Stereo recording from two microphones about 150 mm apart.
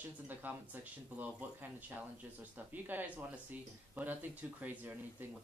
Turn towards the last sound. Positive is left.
turn(degrees=-15)  # may be behind; listen again after turning